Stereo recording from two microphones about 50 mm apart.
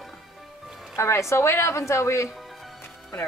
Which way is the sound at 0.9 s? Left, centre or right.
Left.